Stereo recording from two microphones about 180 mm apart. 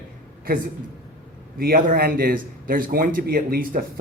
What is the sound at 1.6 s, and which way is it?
A man's voice, 55° right (ahead or behind).